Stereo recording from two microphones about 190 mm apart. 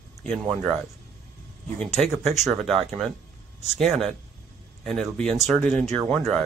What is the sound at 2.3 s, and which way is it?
A man's voice, centre (ahead or behind).